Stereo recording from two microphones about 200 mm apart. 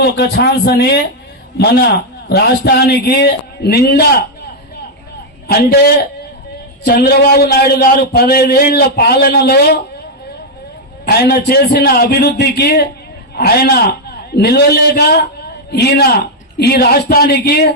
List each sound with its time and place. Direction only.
0.0 s a man's voice: 55° left (ahead or behind)
5.5 s a man's voice: 50° left (ahead or behind)
11.0 s a man's voice: 50° left (ahead or behind)